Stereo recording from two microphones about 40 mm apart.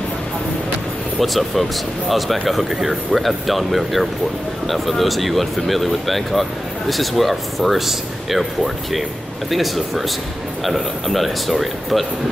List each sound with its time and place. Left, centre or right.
1.2 s speech: centre
9.5 s speech: centre